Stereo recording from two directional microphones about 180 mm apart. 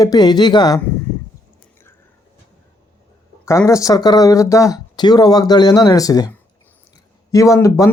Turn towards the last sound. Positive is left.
turn(degrees=15)  # may be behind; listen again after turning